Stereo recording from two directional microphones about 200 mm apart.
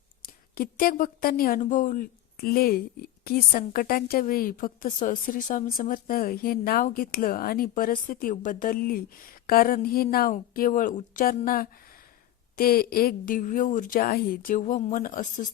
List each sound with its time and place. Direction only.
0.5 s speech: 45° left (ahead or behind)